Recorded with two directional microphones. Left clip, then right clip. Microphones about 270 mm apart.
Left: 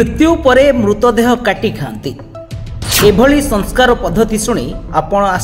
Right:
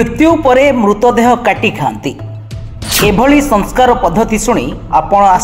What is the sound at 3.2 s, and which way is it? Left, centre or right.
A woman's voice, right.